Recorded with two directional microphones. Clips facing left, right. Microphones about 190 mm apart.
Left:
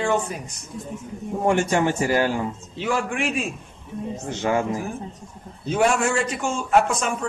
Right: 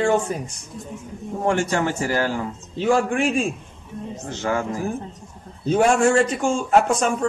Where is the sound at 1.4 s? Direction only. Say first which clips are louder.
Left 1 dB; 15° left (ahead or behind).